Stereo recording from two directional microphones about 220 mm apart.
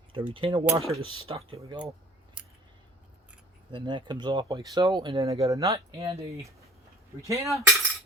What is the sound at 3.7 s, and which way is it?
Speech, 20° right (ahead or behind).